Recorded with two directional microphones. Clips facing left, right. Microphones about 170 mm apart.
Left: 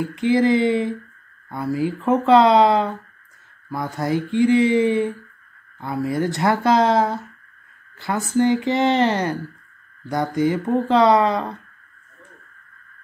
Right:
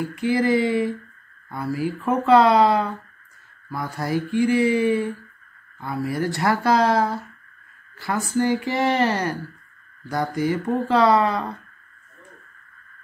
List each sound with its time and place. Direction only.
0.0 s speech: 20° left (ahead or behind)